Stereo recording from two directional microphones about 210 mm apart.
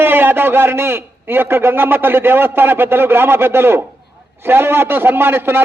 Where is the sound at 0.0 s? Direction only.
10° right (ahead or behind).